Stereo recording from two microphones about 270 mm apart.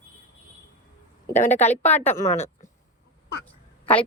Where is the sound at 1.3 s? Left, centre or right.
Left.